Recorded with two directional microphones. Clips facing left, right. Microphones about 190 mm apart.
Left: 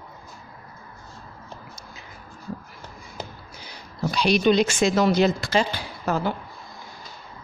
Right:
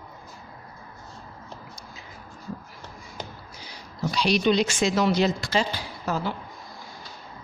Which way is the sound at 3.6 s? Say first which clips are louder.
Left 2 dB; 55° left (ahead or behind).